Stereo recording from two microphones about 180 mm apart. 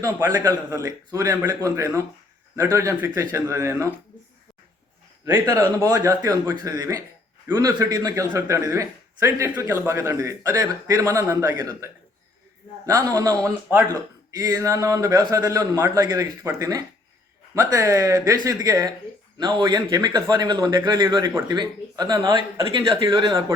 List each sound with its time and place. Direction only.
0.0 s speech: 20° right (ahead or behind)
5.2 s speech: 20° right (ahead or behind)